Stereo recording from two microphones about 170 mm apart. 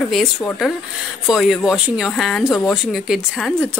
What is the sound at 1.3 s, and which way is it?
Speech, centre (ahead or behind).